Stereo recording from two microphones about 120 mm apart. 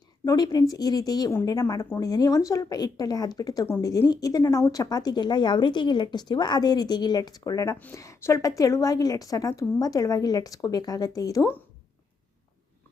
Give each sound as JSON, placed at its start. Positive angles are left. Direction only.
{"t": 0.3, "sound": "a woman's voice", "side_deg": 30}